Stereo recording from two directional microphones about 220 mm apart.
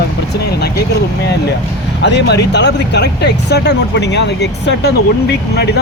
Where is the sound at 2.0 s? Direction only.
50° left (ahead or behind).